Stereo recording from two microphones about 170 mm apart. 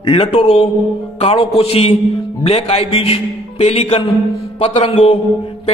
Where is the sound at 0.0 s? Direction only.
35° left (ahead or behind).